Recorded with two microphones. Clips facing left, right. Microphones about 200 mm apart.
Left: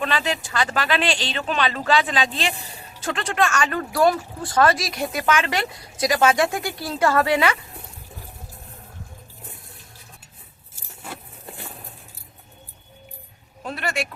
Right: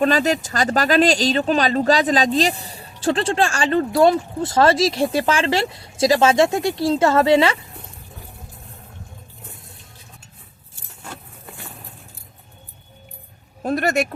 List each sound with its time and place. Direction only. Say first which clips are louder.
0.0 s speech: right 7 dB; 40° right (ahead or behind); by 7.6 s 25° right (ahead or behind)
13.6 s speech: right 8 dB; 45° right (ahead or behind)